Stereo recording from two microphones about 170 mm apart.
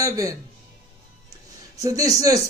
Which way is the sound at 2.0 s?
20° right (ahead or behind).